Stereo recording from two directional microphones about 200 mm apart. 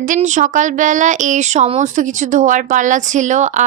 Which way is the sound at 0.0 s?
40° right (ahead or behind).